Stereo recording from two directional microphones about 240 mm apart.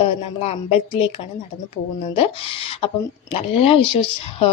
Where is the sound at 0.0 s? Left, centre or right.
Left.